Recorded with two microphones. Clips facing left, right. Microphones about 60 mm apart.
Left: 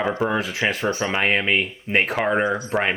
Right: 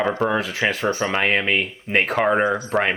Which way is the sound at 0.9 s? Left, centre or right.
Right.